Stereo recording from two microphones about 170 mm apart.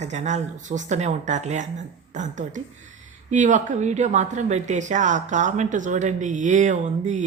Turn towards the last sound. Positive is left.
turn(degrees=-45)  # may be behind; listen again after turning